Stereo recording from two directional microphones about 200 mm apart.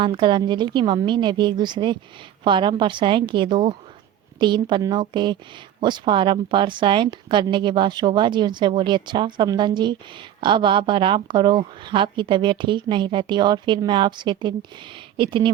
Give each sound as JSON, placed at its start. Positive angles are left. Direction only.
{"t": 0.0, "sound": "speech", "side_deg": -25}